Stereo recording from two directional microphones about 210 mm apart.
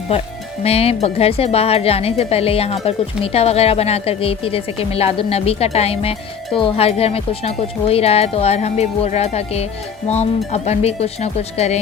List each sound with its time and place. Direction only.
0.6 s speech: 30° left (ahead or behind)